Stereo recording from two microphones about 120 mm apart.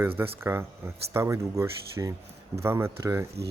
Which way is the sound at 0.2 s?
20° right (ahead or behind).